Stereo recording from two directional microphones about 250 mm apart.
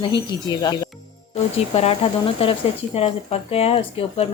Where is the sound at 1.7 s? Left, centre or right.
Left.